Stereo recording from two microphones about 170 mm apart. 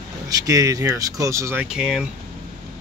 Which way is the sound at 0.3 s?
20° right (ahead or behind).